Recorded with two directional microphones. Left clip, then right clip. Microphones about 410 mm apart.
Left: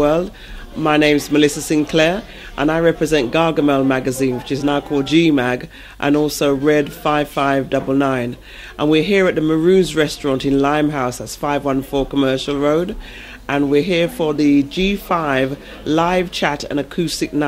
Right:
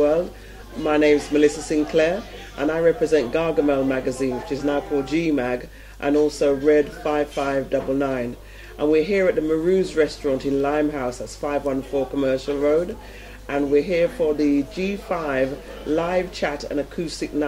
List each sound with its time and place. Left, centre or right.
0.8 s a man's voice: left